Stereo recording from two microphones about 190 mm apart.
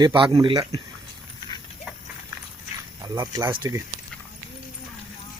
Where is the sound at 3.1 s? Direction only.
15° right (ahead or behind).